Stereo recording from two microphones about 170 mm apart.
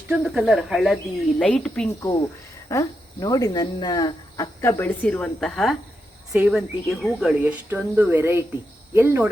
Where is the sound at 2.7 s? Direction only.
20° left (ahead or behind); by 7.3 s centre (ahead or behind).